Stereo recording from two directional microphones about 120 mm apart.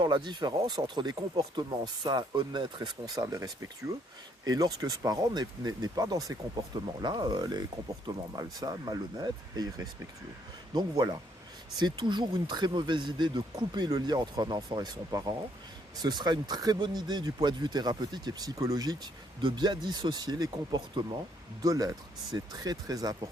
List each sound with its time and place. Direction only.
0.0 s speech: 40° right (ahead or behind)